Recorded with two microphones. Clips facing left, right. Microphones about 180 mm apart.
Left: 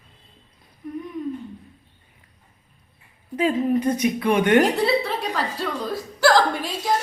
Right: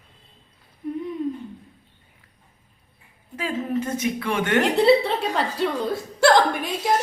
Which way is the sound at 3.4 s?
15° left (ahead or behind).